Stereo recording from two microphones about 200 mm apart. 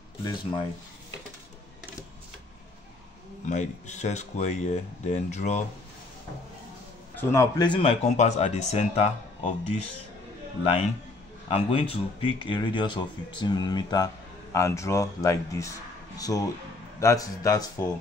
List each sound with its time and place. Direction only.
3.4 s speech: 35° left (ahead or behind)
7.2 s speech: 15° left (ahead or behind)